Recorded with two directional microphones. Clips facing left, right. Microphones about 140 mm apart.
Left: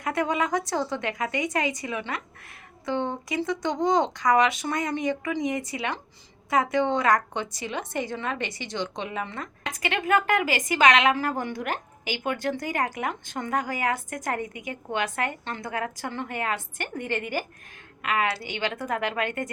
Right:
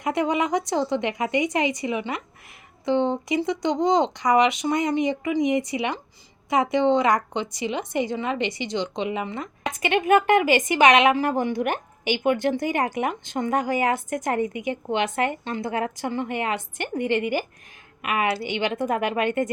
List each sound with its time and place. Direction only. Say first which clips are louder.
0.0 s a woman's voice: right 3 dB; 20° right (ahead or behind)